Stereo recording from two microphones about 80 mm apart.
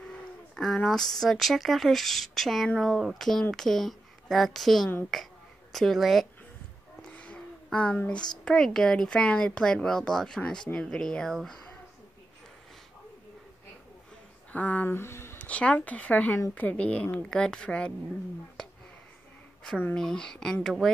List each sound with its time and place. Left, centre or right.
0.6 s a woman's voice: centre
5.1 s a sound: centre
7.1 s a sound: centre
8.5 s speech: centre
14.5 s speech: centre
14.9 s speech: left
15.3 s speech: centre
20.0 s speech: centre